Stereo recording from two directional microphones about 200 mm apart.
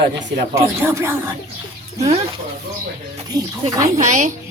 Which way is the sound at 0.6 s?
15° right (ahead or behind).